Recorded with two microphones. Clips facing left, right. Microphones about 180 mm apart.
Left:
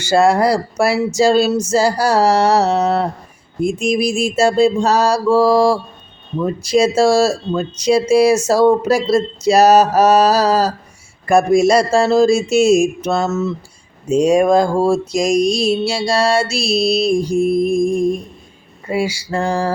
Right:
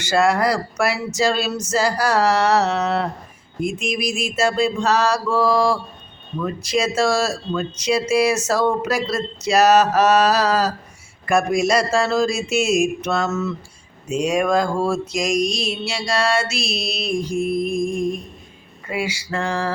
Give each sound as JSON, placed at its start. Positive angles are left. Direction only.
{"t": 0.1, "sound": "mantra", "side_deg": 30}